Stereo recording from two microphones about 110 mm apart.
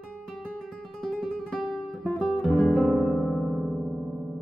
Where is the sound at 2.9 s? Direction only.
Centre (ahead or behind).